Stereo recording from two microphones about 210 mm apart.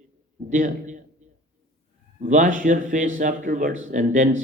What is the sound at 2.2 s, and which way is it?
A man's voice, 35° right (ahead or behind).